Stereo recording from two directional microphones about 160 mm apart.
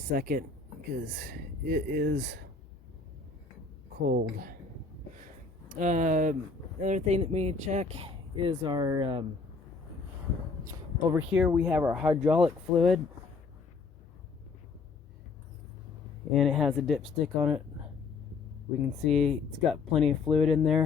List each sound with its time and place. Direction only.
0.1 s speech: 65° right (ahead or behind)
1.0 s speech: 90° right
4.1 s a woman's voice: 70° right (ahead or behind)
5.7 s speech: 50° right (ahead or behind); by 9.2 s 30° right (ahead or behind)
11.1 s speech: 10° right (ahead or behind)
16.3 s speech: centre (ahead or behind)
19.0 s speech: centre (ahead or behind)